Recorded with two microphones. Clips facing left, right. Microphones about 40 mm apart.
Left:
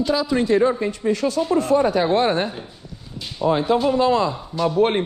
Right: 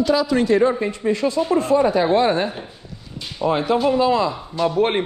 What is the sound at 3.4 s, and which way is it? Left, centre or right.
Speech, right.